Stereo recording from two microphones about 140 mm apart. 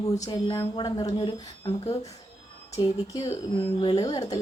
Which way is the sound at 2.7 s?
25° left (ahead or behind).